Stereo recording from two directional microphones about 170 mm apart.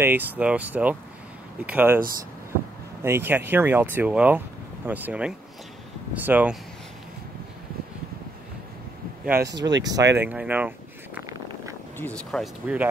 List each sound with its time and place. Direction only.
0.0 s speech: 10° right (ahead or behind)
3.0 s speech: 15° right (ahead or behind)
9.2 s speech: 10° right (ahead or behind)
12.0 s speech: 5° left (ahead or behind)